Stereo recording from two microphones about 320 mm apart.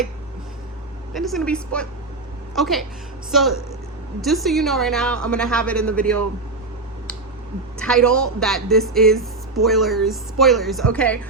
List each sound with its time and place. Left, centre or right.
1.1 s speech: centre
4.2 s speech: centre
7.8 s speech: centre